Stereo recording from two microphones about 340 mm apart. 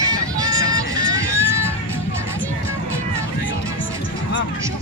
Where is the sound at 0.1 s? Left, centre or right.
Centre.